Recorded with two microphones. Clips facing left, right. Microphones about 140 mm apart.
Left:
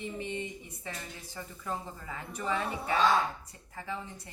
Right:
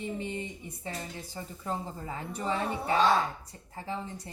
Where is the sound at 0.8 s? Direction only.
30° right (ahead or behind).